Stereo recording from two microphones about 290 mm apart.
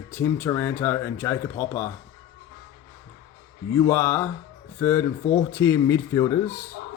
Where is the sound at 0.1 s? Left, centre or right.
Centre.